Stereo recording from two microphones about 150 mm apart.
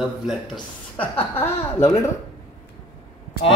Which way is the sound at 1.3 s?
15° left (ahead or behind).